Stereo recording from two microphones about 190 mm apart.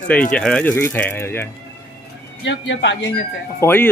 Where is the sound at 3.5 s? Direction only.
10° left (ahead or behind).